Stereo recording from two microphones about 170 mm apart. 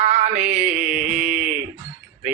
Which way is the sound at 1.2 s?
45° right (ahead or behind).